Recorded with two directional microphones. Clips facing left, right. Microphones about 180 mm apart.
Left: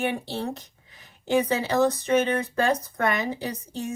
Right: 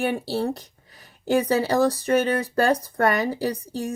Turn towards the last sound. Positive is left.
turn(degrees=-35)  # may be behind; listen again after turning